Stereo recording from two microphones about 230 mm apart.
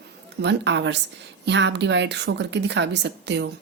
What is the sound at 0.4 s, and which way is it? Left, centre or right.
A woman's voice, right.